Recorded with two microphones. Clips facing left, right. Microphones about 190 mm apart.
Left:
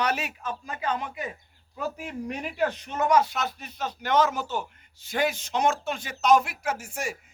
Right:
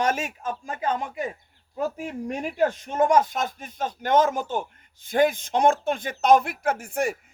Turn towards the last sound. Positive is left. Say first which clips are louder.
# right 6 dB
turn(degrees=-55)  # may be behind; listen again after turning